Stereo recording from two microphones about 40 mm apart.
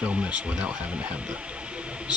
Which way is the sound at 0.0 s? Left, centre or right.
Right.